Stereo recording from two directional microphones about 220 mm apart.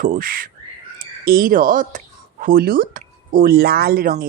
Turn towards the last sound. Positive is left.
turn(degrees=-40)  # may be behind; listen again after turning